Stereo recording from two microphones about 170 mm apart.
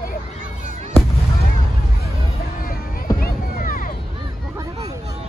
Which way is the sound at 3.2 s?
55° left (ahead or behind).